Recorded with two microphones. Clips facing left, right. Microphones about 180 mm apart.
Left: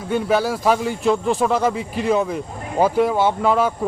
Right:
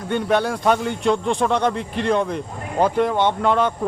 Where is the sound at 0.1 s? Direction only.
5° left (ahead or behind).